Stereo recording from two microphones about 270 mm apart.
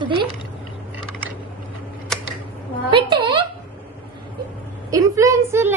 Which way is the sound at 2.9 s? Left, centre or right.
Centre.